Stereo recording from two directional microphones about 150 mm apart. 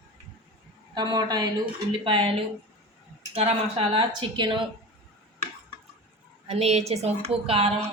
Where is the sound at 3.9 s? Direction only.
30° right (ahead or behind).